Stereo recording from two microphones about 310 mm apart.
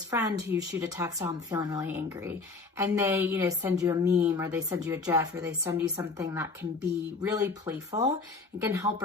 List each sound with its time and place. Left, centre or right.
0.1 s a woman's voice: centre